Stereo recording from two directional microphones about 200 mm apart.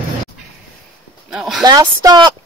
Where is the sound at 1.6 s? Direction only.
20° right (ahead or behind).